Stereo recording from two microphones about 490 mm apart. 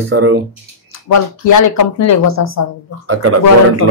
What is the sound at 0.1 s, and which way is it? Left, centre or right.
Speech, right.